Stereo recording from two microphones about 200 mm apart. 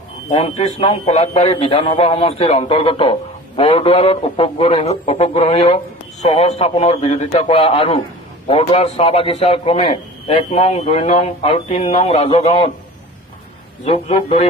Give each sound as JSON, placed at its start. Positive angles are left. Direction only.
{"t": 0.3, "sound": "a man's voice", "side_deg": 30}
{"t": 13.8, "sound": "a man's voice", "side_deg": 30}